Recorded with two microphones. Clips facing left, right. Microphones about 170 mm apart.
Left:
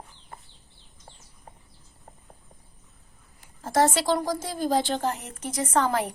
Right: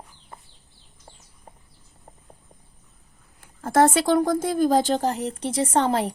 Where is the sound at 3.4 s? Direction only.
55° right (ahead or behind).